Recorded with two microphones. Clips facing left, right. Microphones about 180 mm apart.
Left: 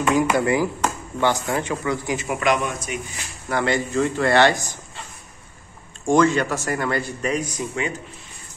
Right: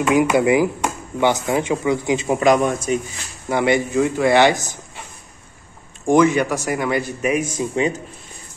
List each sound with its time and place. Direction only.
0.1 s speech: 10° right (ahead or behind)
2.2 s a man's voice: 35° right (ahead or behind)
3.4 s speech: 15° right (ahead or behind)
6.0 s speech: 20° right (ahead or behind)
7.4 s speech: 30° right (ahead or behind)